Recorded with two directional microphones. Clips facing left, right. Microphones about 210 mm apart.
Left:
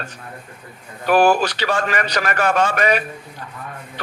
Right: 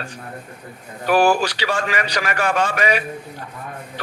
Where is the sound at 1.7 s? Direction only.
45° left (ahead or behind).